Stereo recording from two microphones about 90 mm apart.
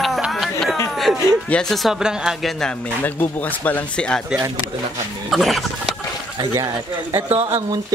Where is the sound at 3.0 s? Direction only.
20° left (ahead or behind).